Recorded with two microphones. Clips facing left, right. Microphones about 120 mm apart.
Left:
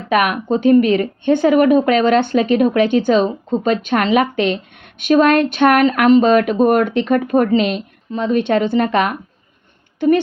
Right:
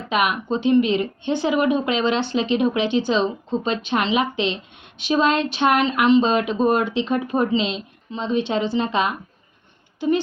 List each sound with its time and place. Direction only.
0.1 s a woman's voice: 55° left (ahead or behind)